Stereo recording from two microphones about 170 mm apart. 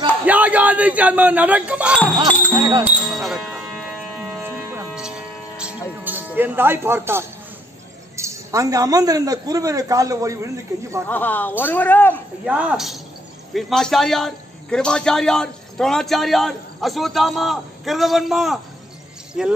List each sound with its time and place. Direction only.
0.3 s speech: 10° right (ahead or behind)
2.2 s speech: 25° right (ahead or behind)
2.8 s music: centre (ahead or behind)
6.0 s speech: 10° right (ahead or behind)
11.1 s speech: 10° left (ahead or behind)
12.4 s a man's voice: 5° right (ahead or behind)